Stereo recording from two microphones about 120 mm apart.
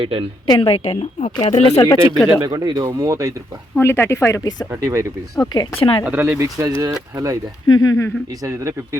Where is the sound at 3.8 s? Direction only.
20° left (ahead or behind).